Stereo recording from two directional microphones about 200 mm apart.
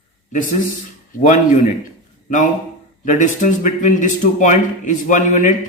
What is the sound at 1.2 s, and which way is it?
Speech, 40° left (ahead or behind).